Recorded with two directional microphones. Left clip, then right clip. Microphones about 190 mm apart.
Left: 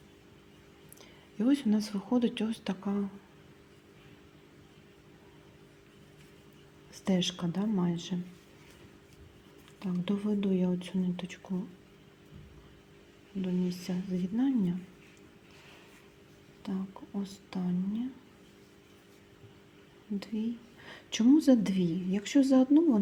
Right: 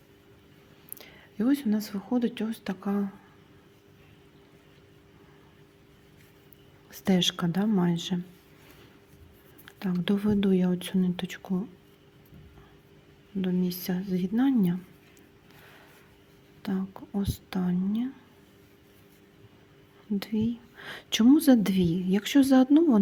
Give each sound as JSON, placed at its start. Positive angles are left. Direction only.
{"t": 1.4, "sound": "speech", "side_deg": -20}
{"t": 6.9, "sound": "speech", "side_deg": -35}
{"t": 9.7, "sound": "speech", "side_deg": -35}
{"t": 13.3, "sound": "speech", "side_deg": -45}
{"t": 13.8, "sound": "speech", "side_deg": -35}
{"t": 16.6, "sound": "speech", "side_deg": -35}
{"t": 20.1, "sound": "speech", "side_deg": -35}